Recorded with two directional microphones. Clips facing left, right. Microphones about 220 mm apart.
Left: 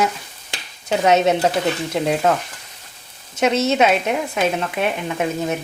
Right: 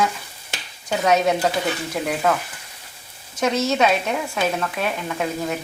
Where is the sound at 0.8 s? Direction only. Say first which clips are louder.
Left 3 dB; 25° left (ahead or behind).